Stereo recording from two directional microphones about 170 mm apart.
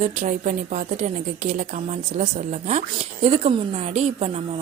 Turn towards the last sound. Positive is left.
turn(degrees=-40)  # may be behind; listen again after turning